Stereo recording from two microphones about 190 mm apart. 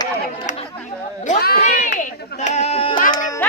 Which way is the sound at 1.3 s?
55° left (ahead or behind).